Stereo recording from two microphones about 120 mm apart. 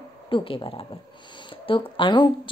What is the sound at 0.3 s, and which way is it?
A woman's voice, 45° left (ahead or behind).